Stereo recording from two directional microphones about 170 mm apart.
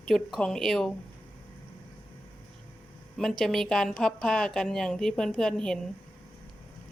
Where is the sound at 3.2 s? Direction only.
Centre (ahead or behind).